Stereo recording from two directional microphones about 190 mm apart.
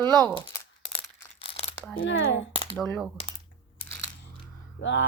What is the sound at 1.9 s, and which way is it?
Speech, 90° left.